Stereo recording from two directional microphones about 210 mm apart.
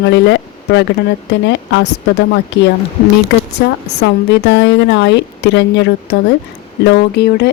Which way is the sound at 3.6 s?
50° left (ahead or behind).